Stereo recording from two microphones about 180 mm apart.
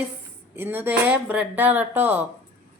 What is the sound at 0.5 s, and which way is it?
Speech, 10° right (ahead or behind).